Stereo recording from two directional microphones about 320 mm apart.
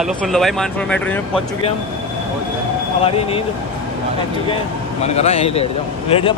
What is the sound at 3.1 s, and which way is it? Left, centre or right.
Speech, centre.